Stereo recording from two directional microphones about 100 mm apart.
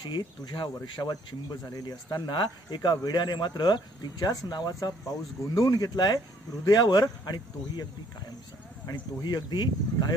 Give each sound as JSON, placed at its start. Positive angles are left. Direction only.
{"t": 0.0, "sound": "speech", "side_deg": 45}
{"t": 8.9, "sound": "speech", "side_deg": 45}